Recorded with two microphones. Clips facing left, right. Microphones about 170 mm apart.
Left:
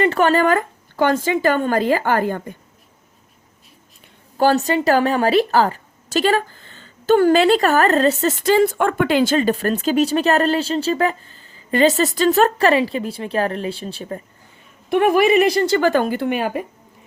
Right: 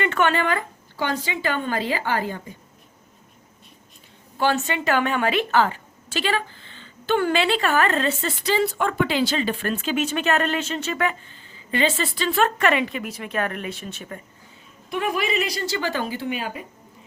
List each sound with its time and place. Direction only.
0.0 s speech: 35° left (ahead or behind); by 2.6 s 55° left (ahead or behind)
4.4 s a woman's voice: 40° left (ahead or behind)
14.8 s a woman's voice: 60° left (ahead or behind)